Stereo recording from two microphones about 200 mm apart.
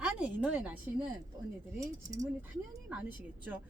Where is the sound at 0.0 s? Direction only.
5° right (ahead or behind).